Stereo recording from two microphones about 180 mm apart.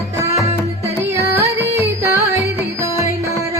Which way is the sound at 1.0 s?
15° right (ahead or behind).